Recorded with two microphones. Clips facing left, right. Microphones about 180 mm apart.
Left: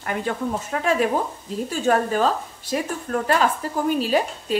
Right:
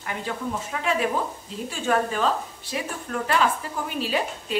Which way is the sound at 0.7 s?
45° left (ahead or behind).